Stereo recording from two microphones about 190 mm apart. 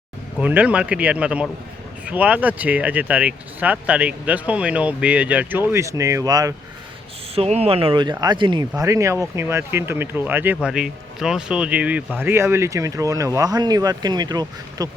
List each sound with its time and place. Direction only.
0.3 s speech: 10° right (ahead or behind)
7.3 s speech: 35° right (ahead or behind)